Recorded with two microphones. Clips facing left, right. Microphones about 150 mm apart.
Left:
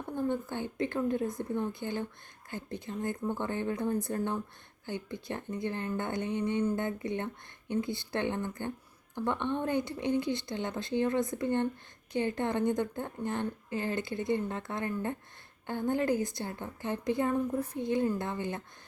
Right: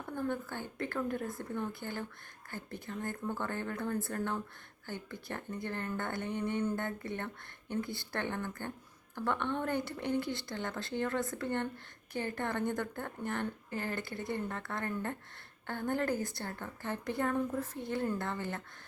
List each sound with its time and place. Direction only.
0.2 s a woman's voice: 20° left (ahead or behind)